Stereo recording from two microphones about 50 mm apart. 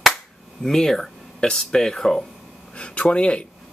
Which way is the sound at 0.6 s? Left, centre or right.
Centre.